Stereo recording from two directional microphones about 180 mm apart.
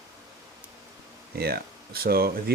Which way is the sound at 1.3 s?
60° right (ahead or behind).